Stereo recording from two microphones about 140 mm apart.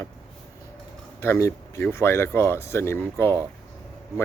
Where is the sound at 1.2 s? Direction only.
20° left (ahead or behind).